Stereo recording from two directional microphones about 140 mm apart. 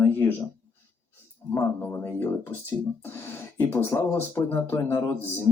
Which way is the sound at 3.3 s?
20° left (ahead or behind).